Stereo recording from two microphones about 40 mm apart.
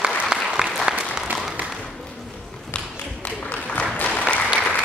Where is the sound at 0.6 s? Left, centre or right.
Centre.